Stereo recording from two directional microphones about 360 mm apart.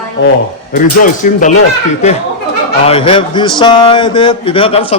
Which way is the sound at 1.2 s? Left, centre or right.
Left.